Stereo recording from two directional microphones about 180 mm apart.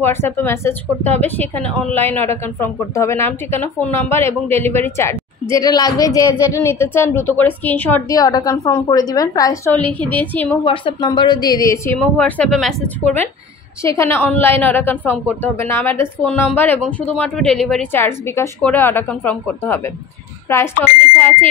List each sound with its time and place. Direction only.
0.0 s a woman's voice: 10° left (ahead or behind)
8.1 s a woman's voice: 20° left (ahead or behind)
10.6 s a woman's voice: 30° left (ahead or behind)